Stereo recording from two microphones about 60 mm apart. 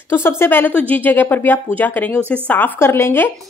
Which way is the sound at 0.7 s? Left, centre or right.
Left.